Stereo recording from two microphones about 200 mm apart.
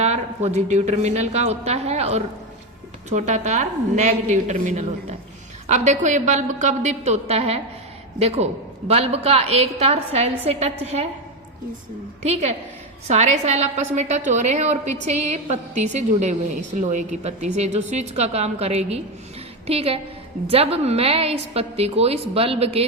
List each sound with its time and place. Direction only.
0.0 s a woman's voice: 35° right (ahead or behind)
8.9 s a woman's voice: 30° right (ahead or behind)
12.2 s a woman's voice: 30° right (ahead or behind)